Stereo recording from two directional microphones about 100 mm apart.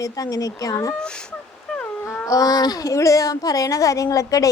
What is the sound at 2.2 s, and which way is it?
Speech, 35° left (ahead or behind).